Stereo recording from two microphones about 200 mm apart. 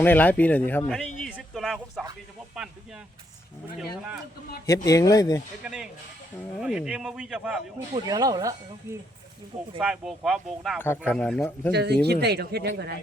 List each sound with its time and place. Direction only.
0.0 s speech: 10° left (ahead or behind)
1.2 s a sound: centre (ahead or behind)
3.8 s speech: 5° right (ahead or behind)
4.6 s speech: 15° left (ahead or behind)
5.6 s speech: 5° right (ahead or behind)
7.9 s speech: 20° right (ahead or behind)
9.8 s speech: 5° right (ahead or behind)
10.8 s speech: 10° left (ahead or behind)
11.7 s speech: 55° right (ahead or behind)